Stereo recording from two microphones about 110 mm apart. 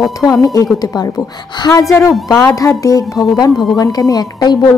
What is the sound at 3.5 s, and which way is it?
Speech, centre (ahead or behind).